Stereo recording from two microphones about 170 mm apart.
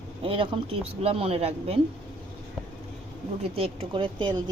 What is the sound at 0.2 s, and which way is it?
Speech, 30° right (ahead or behind).